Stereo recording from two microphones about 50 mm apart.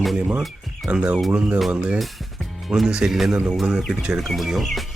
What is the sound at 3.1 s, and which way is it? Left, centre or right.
Speech, centre.